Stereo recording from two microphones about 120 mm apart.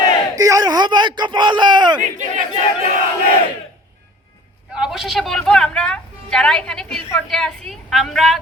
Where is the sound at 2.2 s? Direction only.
90° right.